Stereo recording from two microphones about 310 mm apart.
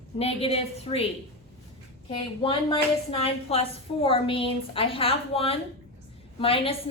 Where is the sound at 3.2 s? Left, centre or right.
Centre.